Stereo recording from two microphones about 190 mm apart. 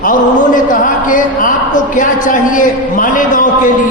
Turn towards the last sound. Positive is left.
turn(degrees=45)  # may be behind; listen again after turning